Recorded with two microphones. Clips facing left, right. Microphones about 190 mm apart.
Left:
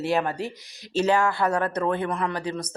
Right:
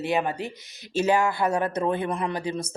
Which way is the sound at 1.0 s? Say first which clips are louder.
Even; 15° right (ahead or behind).